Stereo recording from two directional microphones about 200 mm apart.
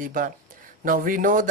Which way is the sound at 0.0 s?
40° right (ahead or behind).